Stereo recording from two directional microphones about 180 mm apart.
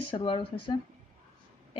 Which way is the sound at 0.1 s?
30° left (ahead or behind).